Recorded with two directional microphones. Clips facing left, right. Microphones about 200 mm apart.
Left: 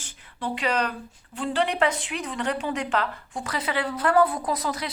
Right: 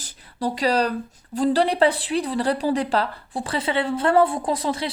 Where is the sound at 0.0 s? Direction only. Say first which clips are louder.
Right 6 dB; 40° right (ahead or behind).